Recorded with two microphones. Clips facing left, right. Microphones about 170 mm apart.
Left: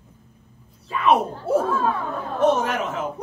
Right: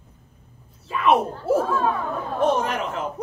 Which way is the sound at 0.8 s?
Centre (ahead or behind).